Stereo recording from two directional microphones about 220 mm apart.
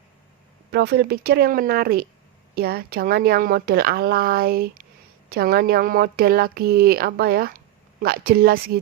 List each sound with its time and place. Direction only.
0.7 s speech: 45° right (ahead or behind)